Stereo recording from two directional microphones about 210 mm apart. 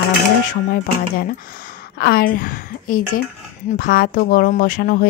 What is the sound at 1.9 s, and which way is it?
A woman's voice, 45° left (ahead or behind).